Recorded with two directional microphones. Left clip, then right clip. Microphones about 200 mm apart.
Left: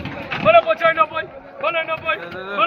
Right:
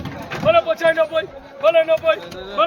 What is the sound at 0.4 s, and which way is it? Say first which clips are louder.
Speech: left 2 dB; 40° right (ahead or behind).